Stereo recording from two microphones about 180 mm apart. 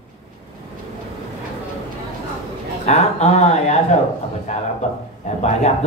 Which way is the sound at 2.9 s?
40° left (ahead or behind).